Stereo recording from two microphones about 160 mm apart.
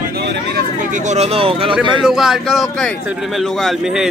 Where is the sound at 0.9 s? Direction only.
50° right (ahead or behind).